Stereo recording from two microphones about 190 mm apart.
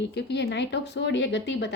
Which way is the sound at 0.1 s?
65° left (ahead or behind).